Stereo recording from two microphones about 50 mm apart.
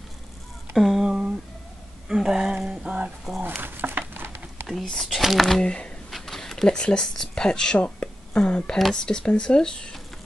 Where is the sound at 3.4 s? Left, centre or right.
Right.